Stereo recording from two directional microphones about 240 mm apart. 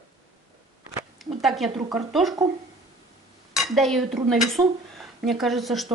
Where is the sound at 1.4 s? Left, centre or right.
Centre.